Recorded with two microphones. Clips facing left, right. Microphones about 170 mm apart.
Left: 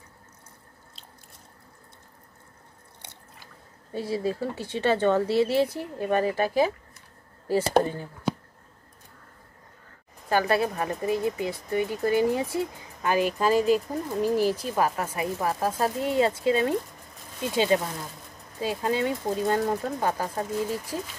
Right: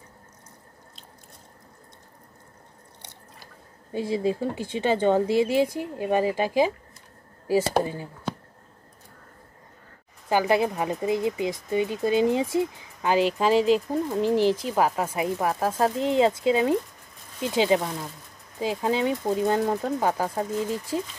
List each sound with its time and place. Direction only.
3.9 s speech: 15° right (ahead or behind)
10.3 s speech: 15° right (ahead or behind)